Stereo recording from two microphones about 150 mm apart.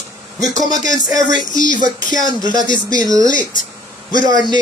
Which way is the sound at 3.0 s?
25° right (ahead or behind).